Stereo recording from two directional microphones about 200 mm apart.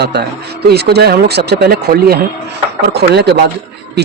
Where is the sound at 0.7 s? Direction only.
55° right (ahead or behind).